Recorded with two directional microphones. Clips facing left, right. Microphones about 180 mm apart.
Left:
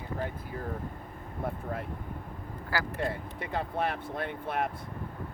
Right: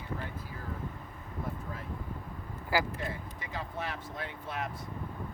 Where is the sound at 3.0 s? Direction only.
60° left (ahead or behind).